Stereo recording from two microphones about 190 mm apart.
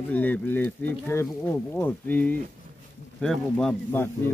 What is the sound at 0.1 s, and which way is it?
Speech, 10° left (ahead or behind).